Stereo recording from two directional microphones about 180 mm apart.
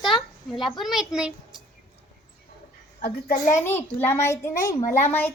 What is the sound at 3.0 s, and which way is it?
Speech, 55° left (ahead or behind).